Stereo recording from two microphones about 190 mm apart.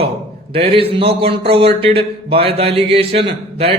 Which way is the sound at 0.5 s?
30° right (ahead or behind).